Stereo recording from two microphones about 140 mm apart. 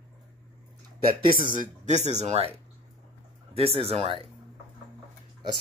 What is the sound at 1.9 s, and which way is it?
Speech, 55° right (ahead or behind).